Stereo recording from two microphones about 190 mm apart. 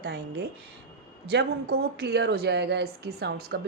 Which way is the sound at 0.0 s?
55° right (ahead or behind).